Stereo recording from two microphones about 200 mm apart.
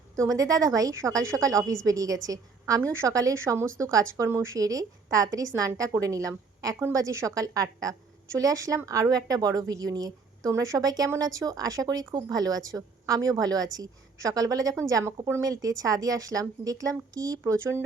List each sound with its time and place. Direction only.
0.2 s a woman's voice: 15° right (ahead or behind)